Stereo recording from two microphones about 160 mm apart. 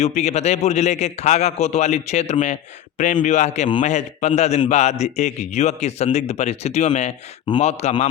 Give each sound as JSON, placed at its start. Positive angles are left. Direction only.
{"t": 0.0, "sound": "a man's voice", "side_deg": 45}